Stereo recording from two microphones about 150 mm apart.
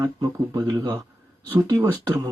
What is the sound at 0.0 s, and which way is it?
Speech, 20° right (ahead or behind).